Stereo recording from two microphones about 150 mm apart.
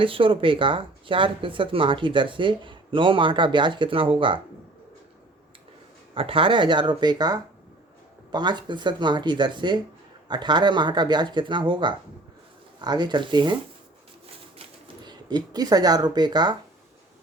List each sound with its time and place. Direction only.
0.0 s speech: 35° right (ahead or behind)
6.1 s speech: 35° right (ahead or behind)
15.0 s speech: 30° right (ahead or behind)